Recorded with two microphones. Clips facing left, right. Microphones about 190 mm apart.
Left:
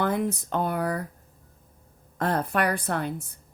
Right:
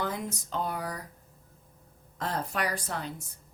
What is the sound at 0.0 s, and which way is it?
A woman's voice, 60° left (ahead or behind).